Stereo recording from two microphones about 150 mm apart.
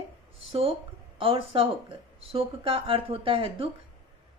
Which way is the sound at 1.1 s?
40° right (ahead or behind).